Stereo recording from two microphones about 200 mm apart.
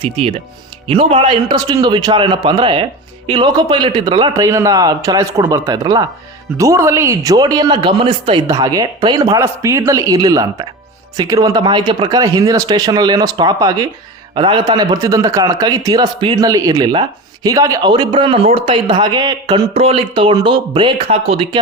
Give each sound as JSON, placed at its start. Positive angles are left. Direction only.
{"t": 0.0, "sound": "speech", "side_deg": -25}